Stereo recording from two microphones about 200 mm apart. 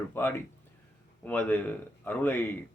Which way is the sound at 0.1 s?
10° left (ahead or behind).